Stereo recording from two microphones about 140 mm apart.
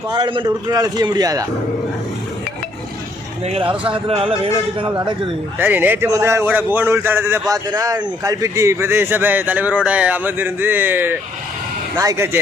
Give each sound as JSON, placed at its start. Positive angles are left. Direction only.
{"t": 0.1, "sound": "a man's voice", "side_deg": -35}
{"t": 3.4, "sound": "speech", "side_deg": -40}
{"t": 5.5, "sound": "a man's voice", "side_deg": -15}